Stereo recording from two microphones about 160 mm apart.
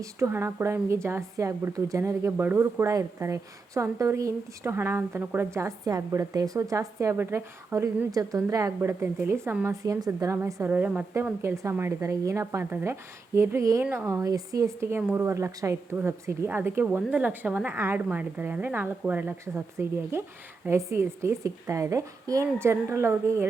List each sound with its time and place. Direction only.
0.0 s a woman's voice: 15° right (ahead or behind)